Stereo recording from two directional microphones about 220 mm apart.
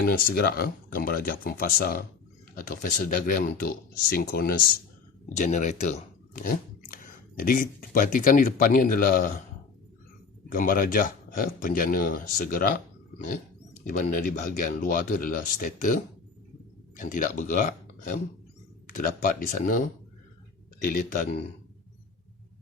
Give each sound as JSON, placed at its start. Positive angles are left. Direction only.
{"t": 0.0, "sound": "speech", "side_deg": 40}
{"t": 10.5, "sound": "speech", "side_deg": 40}
{"t": 20.8, "sound": "speech", "side_deg": 35}